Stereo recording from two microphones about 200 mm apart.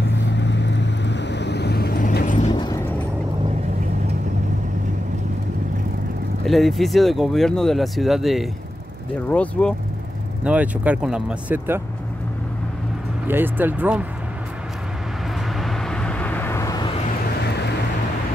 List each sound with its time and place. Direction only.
0.0 s vehicle: 60° left (ahead or behind); by 2.5 s 40° left (ahead or behind)
2.5 s vehicle: 20° left (ahead or behind)
6.4 s speech: centre (ahead or behind)
10.4 s speech: 5° right (ahead or behind)
13.3 s speech: 10° right (ahead or behind)
15.6 s vehicle: 5° left (ahead or behind)